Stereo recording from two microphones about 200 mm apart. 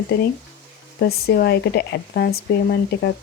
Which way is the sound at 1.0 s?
50° left (ahead or behind).